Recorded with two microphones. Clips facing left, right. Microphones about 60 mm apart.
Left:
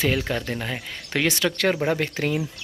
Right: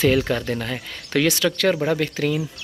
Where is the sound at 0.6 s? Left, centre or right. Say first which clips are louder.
Right 1 dB; centre.